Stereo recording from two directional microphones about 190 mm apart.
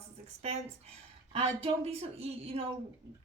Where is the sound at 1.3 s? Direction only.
30° right (ahead or behind).